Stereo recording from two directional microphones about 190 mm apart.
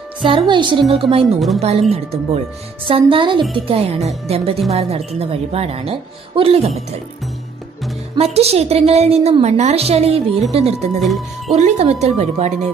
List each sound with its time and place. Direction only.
0.5 s speech: 25° right (ahead or behind)
1.2 s speech: centre (ahead or behind)
1.6 s a woman's voice: 35° right (ahead or behind)
8.2 s a woman's voice: 35° right (ahead or behind)
11.0 s speech: centre (ahead or behind)
11.5 s a woman's voice: 35° right (ahead or behind)